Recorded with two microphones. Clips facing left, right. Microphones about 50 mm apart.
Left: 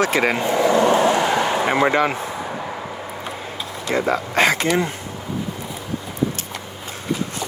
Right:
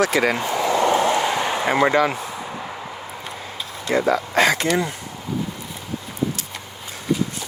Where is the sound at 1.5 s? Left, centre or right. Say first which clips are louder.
Left 1 dB; left.